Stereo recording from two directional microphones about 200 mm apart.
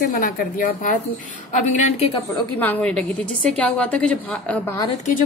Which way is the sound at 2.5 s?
5° left (ahead or behind).